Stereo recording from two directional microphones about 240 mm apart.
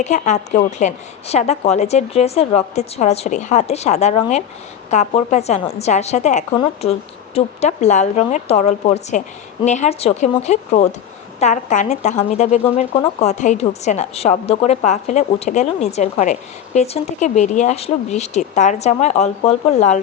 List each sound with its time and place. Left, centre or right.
0.0 s a woman's voice: left